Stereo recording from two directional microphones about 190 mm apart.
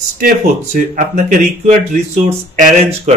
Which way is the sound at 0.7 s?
40° right (ahead or behind).